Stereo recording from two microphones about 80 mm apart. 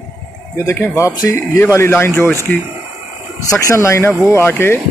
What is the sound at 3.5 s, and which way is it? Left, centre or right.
Speech, left.